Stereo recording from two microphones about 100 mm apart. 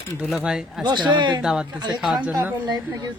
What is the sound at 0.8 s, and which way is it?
Speech, 50° right (ahead or behind).